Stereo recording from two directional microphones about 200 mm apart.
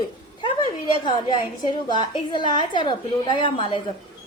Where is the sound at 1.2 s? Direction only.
20° left (ahead or behind).